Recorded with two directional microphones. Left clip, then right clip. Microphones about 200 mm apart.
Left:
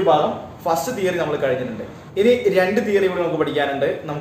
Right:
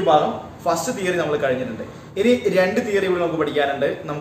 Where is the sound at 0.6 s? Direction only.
10° left (ahead or behind).